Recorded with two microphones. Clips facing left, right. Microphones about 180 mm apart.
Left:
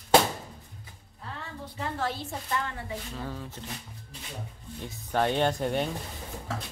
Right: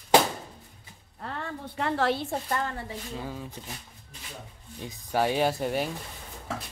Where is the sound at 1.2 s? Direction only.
65° right (ahead or behind).